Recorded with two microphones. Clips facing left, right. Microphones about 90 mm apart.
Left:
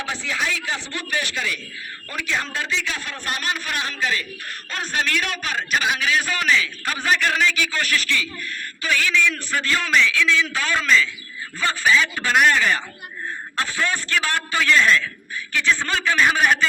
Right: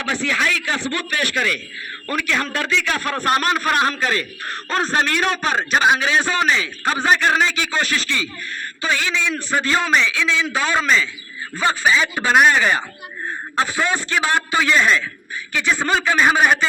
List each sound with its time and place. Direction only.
0.0 s a man's voice: 65° right (ahead or behind); by 16.6 s 20° right (ahead or behind)